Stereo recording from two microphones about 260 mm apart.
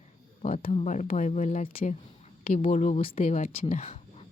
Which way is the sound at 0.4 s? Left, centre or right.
Left.